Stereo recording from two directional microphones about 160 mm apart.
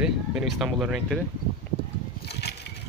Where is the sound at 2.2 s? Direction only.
90° left.